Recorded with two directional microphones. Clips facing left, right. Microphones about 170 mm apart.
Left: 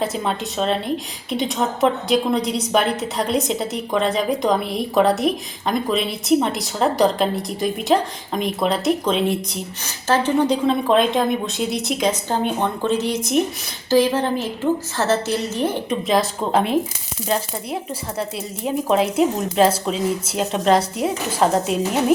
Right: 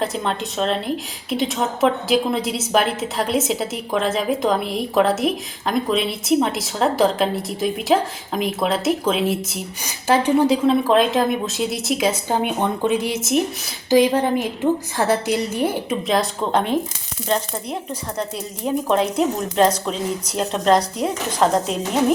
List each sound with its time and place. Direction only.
0.0 s a woman's voice: centre (ahead or behind)
10.5 s a woman's voice: centre (ahead or behind)